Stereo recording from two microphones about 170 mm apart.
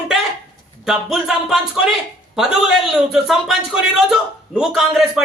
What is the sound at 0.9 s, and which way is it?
A man's voice, centre (ahead or behind).